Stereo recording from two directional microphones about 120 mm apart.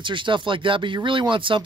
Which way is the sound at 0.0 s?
40° right (ahead or behind).